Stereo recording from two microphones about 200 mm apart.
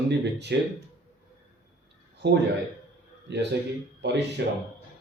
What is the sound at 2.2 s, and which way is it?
Speech, 60° right (ahead or behind).